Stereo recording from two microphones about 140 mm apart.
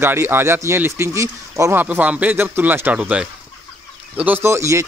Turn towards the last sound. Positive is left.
turn(degrees=-20)  # may be behind; listen again after turning